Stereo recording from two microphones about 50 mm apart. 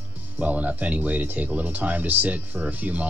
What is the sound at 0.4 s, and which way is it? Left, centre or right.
Speech, right.